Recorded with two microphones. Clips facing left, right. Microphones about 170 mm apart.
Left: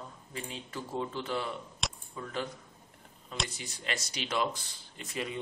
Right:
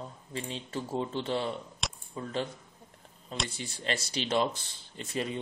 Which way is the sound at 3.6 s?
30° right (ahead or behind).